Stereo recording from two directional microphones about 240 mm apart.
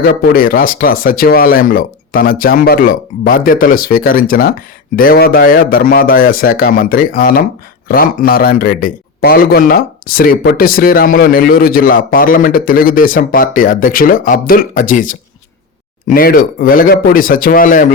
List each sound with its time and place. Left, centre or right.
0.0 s a man's voice: left